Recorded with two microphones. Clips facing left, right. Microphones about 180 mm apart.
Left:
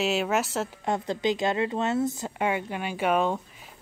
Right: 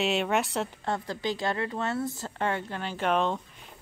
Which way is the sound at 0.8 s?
20° left (ahead or behind).